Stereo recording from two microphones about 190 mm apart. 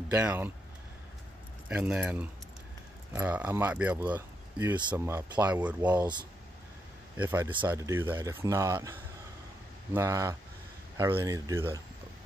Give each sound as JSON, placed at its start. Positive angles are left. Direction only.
{"t": 0.1, "sound": "speech", "side_deg": -10}
{"t": 1.7, "sound": "speech", "side_deg": -5}
{"t": 7.2, "sound": "speech", "side_deg": -10}
{"t": 9.9, "sound": "speech", "side_deg": -15}